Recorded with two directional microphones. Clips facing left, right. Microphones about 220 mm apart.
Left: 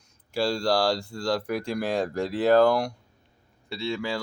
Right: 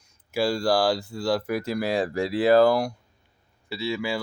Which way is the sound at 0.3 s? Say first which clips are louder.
Right 2 dB; 5° right (ahead or behind).